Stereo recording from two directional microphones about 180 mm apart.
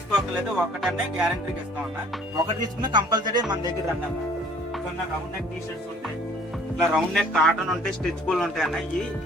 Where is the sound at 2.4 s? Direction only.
25° right (ahead or behind).